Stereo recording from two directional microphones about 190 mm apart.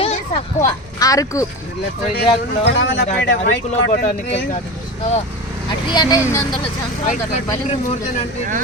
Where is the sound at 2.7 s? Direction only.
65° left (ahead or behind).